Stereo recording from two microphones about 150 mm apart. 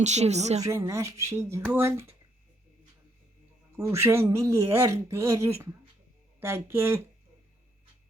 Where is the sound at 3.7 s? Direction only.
20° right (ahead or behind).